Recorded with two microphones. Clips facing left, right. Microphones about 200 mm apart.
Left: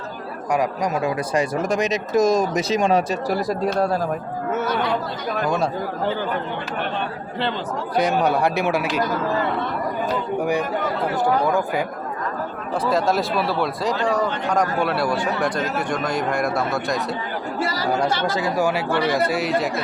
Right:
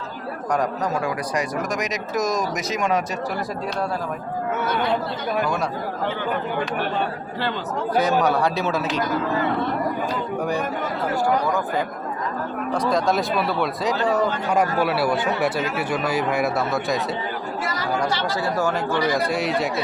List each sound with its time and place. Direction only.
1.0 s speech: 25° left (ahead or behind)
7.9 s a man's voice: 15° left (ahead or behind)
12.8 s speech: 5° left (ahead or behind)
17.6 s chatter: 30° left (ahead or behind)
18.1 s speech: 50° left (ahead or behind)
18.3 s a man's voice: 15° left (ahead or behind)
19.1 s speech: centre (ahead or behind)